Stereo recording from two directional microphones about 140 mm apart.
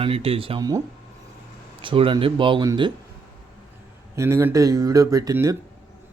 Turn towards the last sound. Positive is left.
turn(degrees=-20)  # may be behind; listen again after turning